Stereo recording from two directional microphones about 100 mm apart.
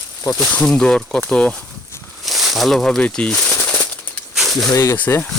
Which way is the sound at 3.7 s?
15° left (ahead or behind).